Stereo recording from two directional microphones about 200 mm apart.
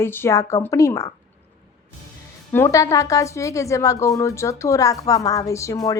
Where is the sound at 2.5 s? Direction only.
15° left (ahead or behind).